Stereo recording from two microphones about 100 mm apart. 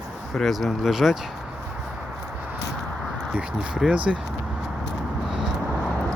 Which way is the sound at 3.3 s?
10° right (ahead or behind).